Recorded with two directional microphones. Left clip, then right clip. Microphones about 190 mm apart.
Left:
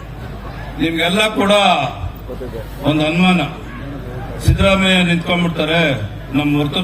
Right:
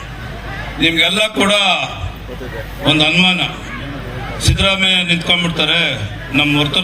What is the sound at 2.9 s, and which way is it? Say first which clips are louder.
A man's voice: right 4 dB; 50° left (ahead or behind).